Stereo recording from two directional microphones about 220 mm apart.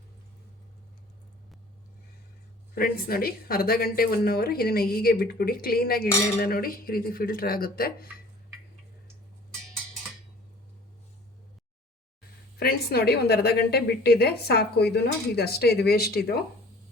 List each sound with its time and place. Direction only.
2.7 s a woman's voice: 40° left (ahead or behind)
12.5 s a woman's voice: 45° left (ahead or behind)